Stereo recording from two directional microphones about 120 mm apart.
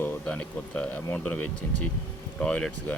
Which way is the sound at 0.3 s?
10° left (ahead or behind).